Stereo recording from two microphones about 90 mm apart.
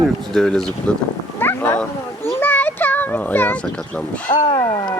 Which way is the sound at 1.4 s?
25° left (ahead or behind).